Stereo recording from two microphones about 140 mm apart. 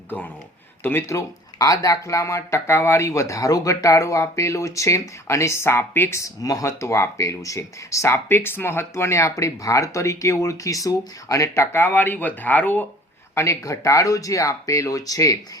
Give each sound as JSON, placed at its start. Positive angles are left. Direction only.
{"t": 0.8, "sound": "speech", "side_deg": 15}